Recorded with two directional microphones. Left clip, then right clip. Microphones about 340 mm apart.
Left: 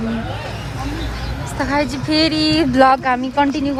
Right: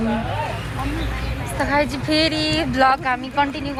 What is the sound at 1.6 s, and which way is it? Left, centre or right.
Speech, centre.